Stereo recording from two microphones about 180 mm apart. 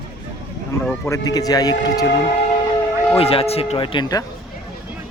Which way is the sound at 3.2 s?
35° left (ahead or behind).